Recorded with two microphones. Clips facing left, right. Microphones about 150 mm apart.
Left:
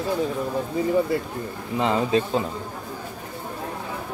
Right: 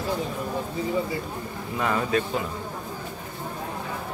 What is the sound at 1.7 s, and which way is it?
Speech, 25° left (ahead or behind).